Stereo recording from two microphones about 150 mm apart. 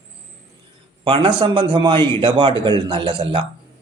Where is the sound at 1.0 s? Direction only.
35° right (ahead or behind).